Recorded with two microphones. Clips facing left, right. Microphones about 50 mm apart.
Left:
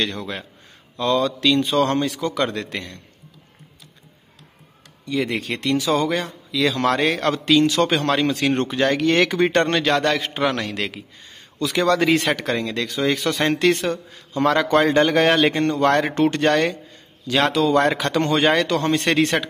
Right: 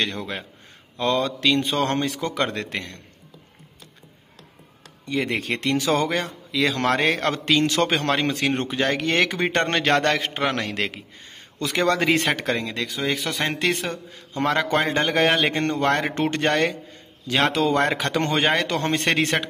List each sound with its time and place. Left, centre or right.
0.0 s a man's voice: right
5.0 s a man's voice: right
10.3 s a man's voice: right
12.7 s speech: centre
14.3 s speech: right
15.2 s speech: centre
15.5 s a man's voice: right
17.3 s a man's voice: right